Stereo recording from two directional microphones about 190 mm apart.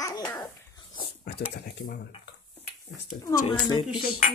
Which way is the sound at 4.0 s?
45° left (ahead or behind).